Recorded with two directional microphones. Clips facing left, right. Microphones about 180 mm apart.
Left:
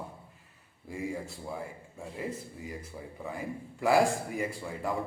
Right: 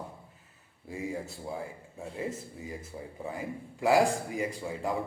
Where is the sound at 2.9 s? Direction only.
25° right (ahead or behind).